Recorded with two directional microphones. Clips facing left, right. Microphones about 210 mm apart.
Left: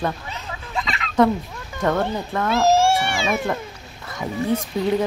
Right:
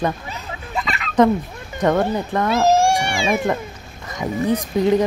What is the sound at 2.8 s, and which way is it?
Cat, 15° right (ahead or behind).